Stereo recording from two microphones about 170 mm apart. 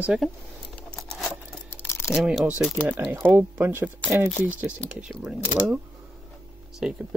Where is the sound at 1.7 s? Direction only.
15° left (ahead or behind).